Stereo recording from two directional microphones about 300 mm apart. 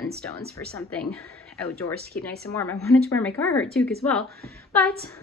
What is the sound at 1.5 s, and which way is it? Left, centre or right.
Speech, centre.